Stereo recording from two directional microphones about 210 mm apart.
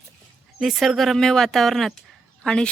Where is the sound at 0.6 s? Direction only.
Centre (ahead or behind).